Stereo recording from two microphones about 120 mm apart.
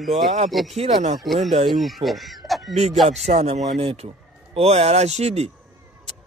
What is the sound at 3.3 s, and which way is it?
Speech, 60° right (ahead or behind).